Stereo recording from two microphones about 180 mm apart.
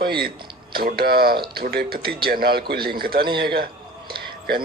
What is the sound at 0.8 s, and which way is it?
A man's voice, 55° right (ahead or behind).